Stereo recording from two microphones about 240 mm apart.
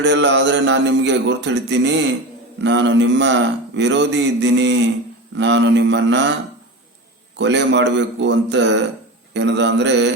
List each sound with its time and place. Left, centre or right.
0.0 s speech: right
7.3 s speech: right